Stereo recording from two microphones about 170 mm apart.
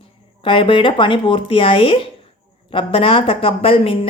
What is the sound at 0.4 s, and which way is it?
A woman's voice, 30° left (ahead or behind).